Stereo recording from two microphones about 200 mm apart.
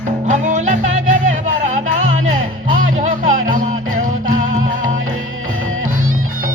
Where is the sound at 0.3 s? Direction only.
40° right (ahead or behind).